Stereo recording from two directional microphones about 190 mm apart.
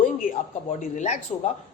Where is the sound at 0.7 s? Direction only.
40° left (ahead or behind).